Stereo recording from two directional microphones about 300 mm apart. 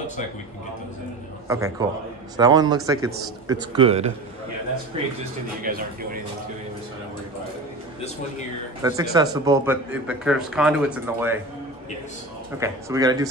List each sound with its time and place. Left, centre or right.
1.5 s a man's voice: centre; by 5.9 s right
8.8 s a man's voice: centre
12.5 s a man's voice: centre